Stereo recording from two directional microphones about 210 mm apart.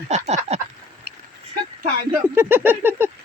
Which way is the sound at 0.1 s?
30° right (ahead or behind).